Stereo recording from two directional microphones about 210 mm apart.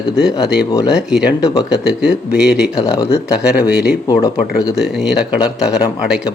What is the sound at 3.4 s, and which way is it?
Speech, 5° right (ahead or behind).